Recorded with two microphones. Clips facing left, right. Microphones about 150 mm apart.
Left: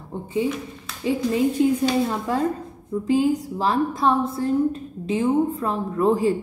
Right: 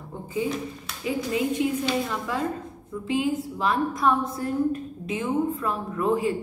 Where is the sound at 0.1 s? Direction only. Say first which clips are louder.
Left 6 dB; 30° left (ahead or behind).